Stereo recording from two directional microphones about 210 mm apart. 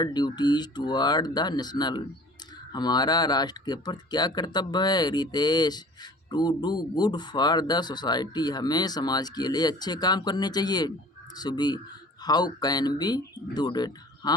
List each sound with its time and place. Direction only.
0.0 s speech: 20° left (ahead or behind)